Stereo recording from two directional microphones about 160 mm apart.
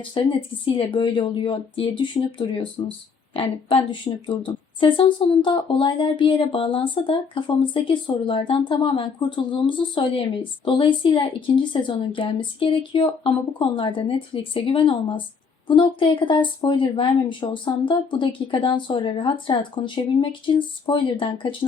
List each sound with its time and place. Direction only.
0.1 s a woman's voice: 35° left (ahead or behind)